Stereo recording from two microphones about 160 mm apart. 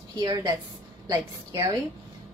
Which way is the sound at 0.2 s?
25° right (ahead or behind).